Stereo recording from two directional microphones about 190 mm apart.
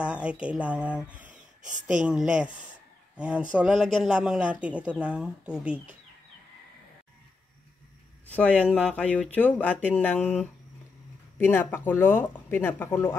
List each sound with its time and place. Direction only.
0.0 s speech: 5° right (ahead or behind)
1.2 s a sound: 40° right (ahead or behind)
2.0 s speech: 5° right (ahead or behind)
8.3 s speech: 5° left (ahead or behind)